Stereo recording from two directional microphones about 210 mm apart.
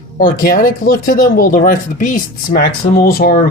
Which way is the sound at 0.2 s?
40° left (ahead or behind).